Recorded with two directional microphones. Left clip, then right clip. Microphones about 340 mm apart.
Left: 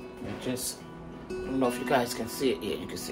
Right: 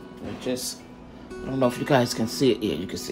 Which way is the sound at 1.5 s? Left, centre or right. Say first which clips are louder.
Right 5 dB; right.